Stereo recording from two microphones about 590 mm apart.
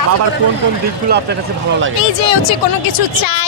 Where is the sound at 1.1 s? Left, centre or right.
Centre.